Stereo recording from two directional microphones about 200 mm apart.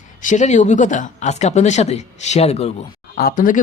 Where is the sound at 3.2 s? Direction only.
45° left (ahead or behind).